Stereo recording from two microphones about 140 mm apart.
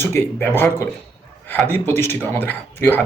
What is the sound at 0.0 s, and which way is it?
Speech, 15° left (ahead or behind).